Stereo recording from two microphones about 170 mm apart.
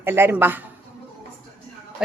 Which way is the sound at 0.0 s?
15° right (ahead or behind).